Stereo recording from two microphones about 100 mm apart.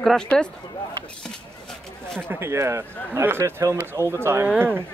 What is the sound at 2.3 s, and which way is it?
Speech, 25° right (ahead or behind).